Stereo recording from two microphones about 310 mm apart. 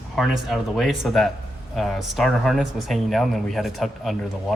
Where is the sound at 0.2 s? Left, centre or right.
Centre.